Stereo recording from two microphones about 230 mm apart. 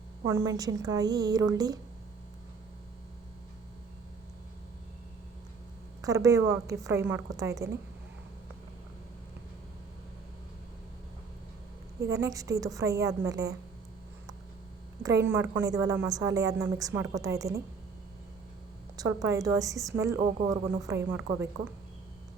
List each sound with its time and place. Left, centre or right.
0.3 s a woman's voice: centre
6.0 s a woman's voice: centre
11.9 s a woman's voice: centre
15.0 s a woman's voice: centre
18.9 s a woman's voice: centre